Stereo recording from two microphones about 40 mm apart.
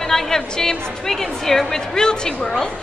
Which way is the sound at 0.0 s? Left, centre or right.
Centre.